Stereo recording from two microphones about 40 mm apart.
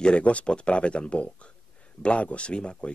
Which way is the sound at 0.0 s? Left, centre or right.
Left.